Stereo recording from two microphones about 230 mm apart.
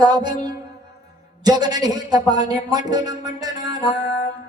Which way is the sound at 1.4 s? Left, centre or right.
Centre.